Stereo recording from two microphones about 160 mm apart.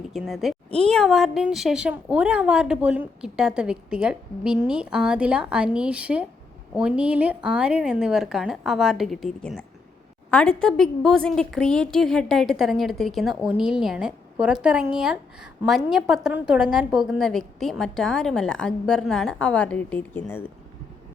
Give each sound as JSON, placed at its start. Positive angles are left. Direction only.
{"t": 0.1, "sound": "a woman's voice", "side_deg": 0}